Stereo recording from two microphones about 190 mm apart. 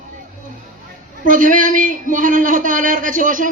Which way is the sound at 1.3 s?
45° right (ahead or behind).